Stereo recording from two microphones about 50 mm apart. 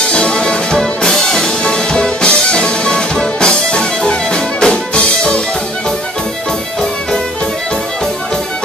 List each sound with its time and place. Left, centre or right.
0.1 s music: centre